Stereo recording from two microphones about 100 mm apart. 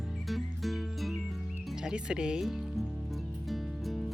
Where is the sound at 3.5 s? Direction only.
Centre (ahead or behind).